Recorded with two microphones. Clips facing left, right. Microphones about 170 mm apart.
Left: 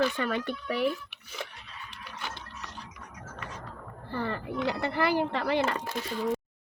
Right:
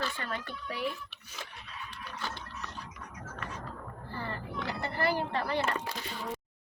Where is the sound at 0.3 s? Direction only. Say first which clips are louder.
Left 8 dB; 70° left (ahead or behind).